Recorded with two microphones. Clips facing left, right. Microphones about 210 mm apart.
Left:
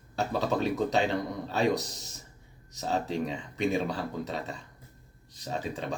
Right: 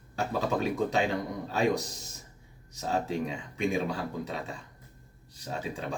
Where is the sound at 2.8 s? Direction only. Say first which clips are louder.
Even; 35° left (ahead or behind).